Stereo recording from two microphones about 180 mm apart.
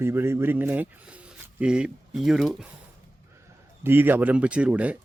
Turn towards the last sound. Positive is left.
turn(degrees=-5)  # may be behind; listen again after turning